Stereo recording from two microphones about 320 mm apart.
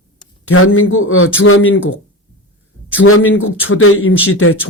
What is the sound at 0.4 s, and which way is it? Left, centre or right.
A man's voice, left.